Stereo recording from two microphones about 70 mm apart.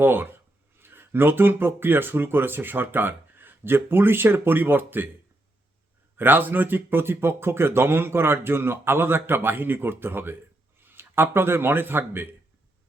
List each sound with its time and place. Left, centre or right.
0.0 s speech: right
6.1 s a man's voice: right